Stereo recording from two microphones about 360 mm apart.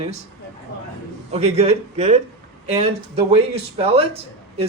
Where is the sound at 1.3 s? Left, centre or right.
Centre.